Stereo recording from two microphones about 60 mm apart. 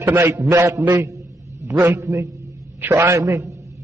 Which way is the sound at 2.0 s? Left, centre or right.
Right.